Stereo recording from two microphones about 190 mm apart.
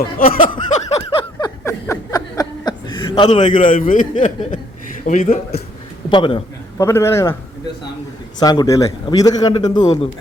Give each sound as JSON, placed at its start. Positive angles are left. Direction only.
{"t": 0.2, "sound": "speech", "side_deg": 50}
{"t": 0.7, "sound": "a sound", "side_deg": 30}
{"t": 3.2, "sound": "a man's voice", "side_deg": 30}
{"t": 3.7, "sound": "a man's voice", "side_deg": 45}
{"t": 6.1, "sound": "a sound", "side_deg": 25}
{"t": 6.8, "sound": "a man's voice", "side_deg": 15}
{"t": 8.4, "sound": "a man's voice", "side_deg": 20}